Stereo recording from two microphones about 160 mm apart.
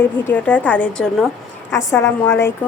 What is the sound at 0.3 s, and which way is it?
Speech, 10° left (ahead or behind).